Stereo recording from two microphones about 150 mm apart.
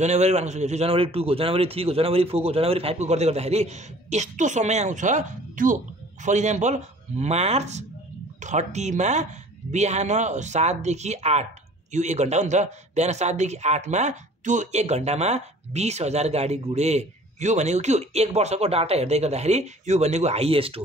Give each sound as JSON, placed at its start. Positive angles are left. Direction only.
{"t": 0.0, "sound": "a man's voice", "side_deg": -50}